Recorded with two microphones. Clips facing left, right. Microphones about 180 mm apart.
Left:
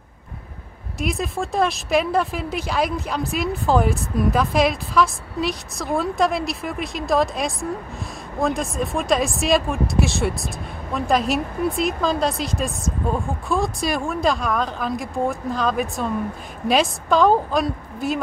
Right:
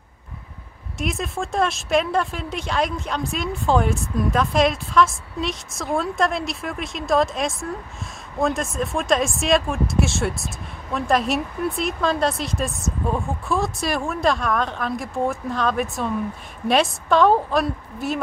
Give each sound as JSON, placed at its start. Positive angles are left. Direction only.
{"t": 0.9, "sound": "speech", "side_deg": 0}